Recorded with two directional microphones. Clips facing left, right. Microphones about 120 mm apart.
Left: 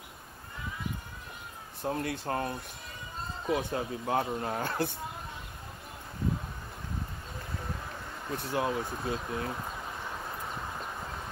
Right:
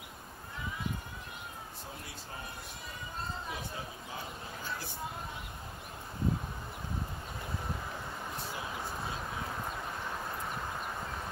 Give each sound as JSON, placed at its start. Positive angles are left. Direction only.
{"t": 1.8, "sound": "speech", "side_deg": 65}
{"t": 8.3, "sound": "speech", "side_deg": 65}
{"t": 9.0, "sound": "speech", "side_deg": 0}